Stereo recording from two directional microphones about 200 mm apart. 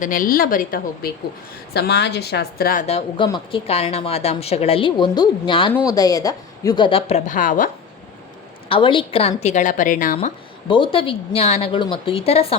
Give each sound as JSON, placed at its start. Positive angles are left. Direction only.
{"t": 0.0, "sound": "a woman's voice", "side_deg": 45}
{"t": 2.8, "sound": "a woman's voice", "side_deg": 30}
{"t": 7.3, "sound": "a woman's voice", "side_deg": 40}
{"t": 8.7, "sound": "a woman's voice", "side_deg": 25}
{"t": 10.2, "sound": "a woman's voice", "side_deg": 25}